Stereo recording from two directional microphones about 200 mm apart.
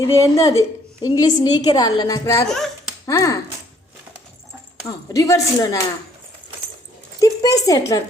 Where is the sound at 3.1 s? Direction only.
15° left (ahead or behind).